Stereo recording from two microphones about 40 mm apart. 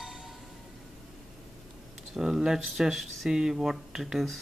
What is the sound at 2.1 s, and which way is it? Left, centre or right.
Speech, centre.